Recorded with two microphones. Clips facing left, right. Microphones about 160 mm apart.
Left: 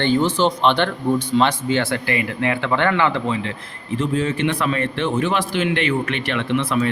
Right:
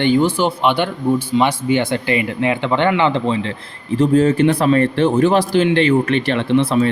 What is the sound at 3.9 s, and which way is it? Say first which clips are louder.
A man's voice: right 8 dB; 40° right (ahead or behind).